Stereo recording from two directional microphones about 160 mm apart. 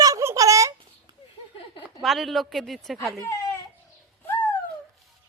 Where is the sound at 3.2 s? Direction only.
15° left (ahead or behind).